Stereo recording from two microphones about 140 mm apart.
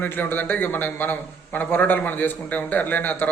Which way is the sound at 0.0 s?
15° left (ahead or behind).